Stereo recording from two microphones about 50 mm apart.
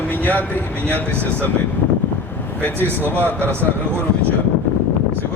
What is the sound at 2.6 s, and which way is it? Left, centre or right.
Speech, left.